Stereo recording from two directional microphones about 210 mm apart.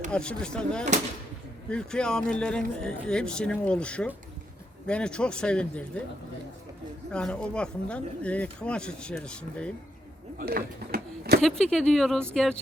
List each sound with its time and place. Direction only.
0.1 s speech: 5° left (ahead or behind)
7.1 s speech: 5° left (ahead or behind)
10.3 s a sound: 45° right (ahead or behind)
11.3 s speech: centre (ahead or behind)